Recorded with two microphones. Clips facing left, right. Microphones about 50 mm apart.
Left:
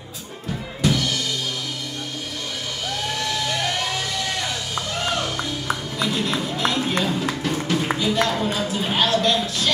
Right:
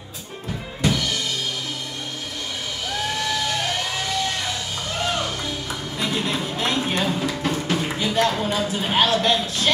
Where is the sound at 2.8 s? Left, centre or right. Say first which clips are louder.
Right 1 dB; centre.